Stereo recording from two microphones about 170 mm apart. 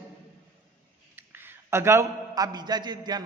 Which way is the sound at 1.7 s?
15° right (ahead or behind).